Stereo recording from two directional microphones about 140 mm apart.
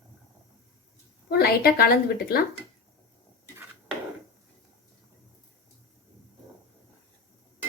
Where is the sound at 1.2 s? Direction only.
90° left.